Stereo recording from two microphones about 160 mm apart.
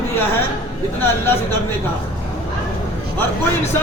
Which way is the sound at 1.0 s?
15° left (ahead or behind).